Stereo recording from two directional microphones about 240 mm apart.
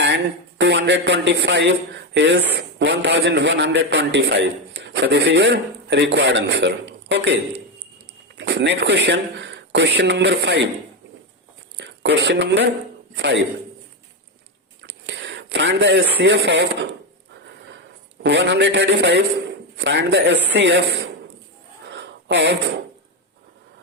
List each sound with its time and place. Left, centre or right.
0.6 s a man's voice: right
8.4 s a man's voice: right
11.8 s a man's voice: right
14.8 s speech: right
18.2 s a man's voice: right
21.8 s a sound: right